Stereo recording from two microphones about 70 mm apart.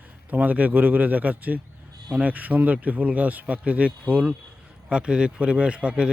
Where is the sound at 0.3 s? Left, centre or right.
Right.